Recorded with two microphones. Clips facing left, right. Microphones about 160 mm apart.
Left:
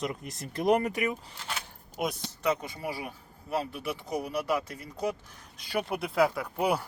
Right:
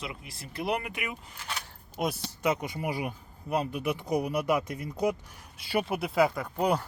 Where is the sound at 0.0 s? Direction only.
45° left (ahead or behind).